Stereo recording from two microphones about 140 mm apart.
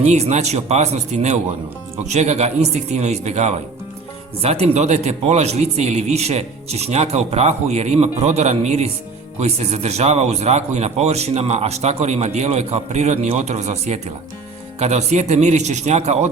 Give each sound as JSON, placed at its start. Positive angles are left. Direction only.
{"t": 0.1, "sound": "a man's voice", "side_deg": -55}